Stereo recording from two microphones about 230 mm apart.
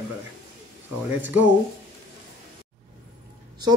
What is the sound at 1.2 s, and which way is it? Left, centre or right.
Speech, centre.